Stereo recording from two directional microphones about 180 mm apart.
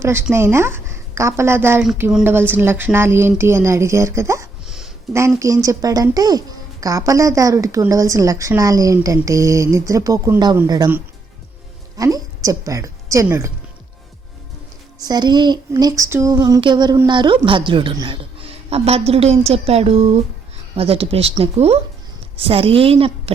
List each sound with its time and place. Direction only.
0.0 s a woman's voice: 15° right (ahead or behind)
2.0 s a woman's voice: centre (ahead or behind)
4.6 s a sound: centre (ahead or behind)
5.1 s a woman's voice: 15° right (ahead or behind)
11.9 s a woman's voice: 20° right (ahead or behind)
14.9 s a woman's voice: 20° right (ahead or behind)